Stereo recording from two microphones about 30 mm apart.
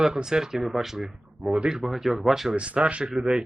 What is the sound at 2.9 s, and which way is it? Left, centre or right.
Speech, right.